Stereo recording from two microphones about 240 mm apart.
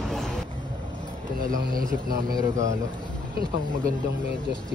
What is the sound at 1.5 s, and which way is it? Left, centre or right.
Speech, right.